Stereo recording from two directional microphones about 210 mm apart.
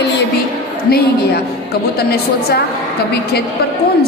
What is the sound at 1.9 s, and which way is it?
Speech, 50° left (ahead or behind).